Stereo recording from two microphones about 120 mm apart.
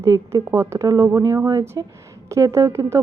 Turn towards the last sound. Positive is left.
turn(degrees=-25)  # may be behind; listen again after turning